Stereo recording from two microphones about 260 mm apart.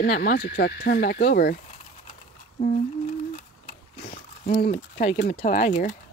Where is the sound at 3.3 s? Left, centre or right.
Left.